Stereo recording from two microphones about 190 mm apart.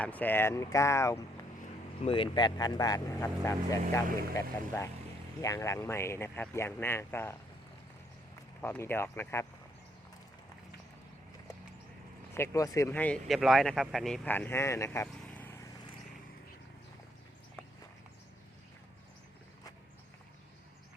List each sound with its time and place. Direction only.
0.0 s speech: 10° left (ahead or behind)
2.0 s speech: 25° left (ahead or behind)
8.6 s speech: 10° left (ahead or behind)
12.3 s speech: 15° left (ahead or behind)